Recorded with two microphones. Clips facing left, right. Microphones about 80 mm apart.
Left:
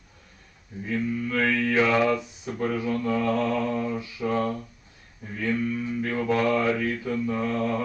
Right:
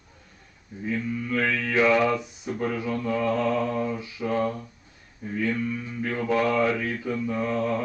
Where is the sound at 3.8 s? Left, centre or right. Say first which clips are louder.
Left 1 dB; centre.